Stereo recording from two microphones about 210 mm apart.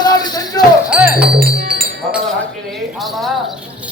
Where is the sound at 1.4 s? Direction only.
45° right (ahead or behind).